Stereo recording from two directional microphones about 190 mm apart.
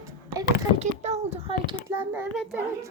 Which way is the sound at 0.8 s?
35° right (ahead or behind).